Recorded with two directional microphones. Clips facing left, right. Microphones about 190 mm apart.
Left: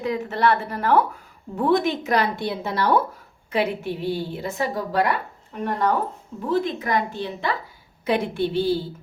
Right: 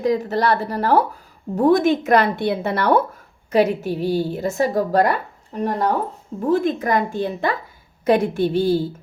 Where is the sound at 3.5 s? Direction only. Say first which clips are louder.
Right 6 dB; 40° right (ahead or behind).